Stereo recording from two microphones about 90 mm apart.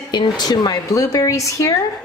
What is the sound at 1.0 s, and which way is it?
Speech, 40° left (ahead or behind).